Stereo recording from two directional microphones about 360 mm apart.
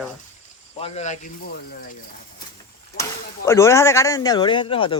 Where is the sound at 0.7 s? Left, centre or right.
Centre.